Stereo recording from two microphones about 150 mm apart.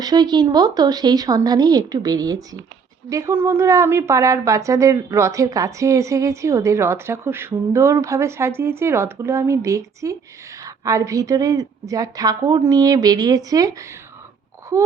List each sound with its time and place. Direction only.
0.0 s a woman's voice: 25° right (ahead or behind)